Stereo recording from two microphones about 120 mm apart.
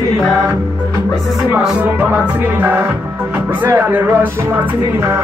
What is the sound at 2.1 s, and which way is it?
Music, 15° right (ahead or behind).